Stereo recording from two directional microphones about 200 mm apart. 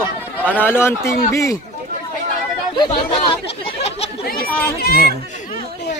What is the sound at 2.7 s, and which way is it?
Speech, 20° left (ahead or behind).